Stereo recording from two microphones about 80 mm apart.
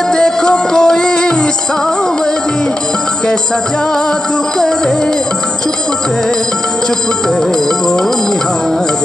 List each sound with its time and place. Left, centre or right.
0.1 s music: centre
4.6 s music: centre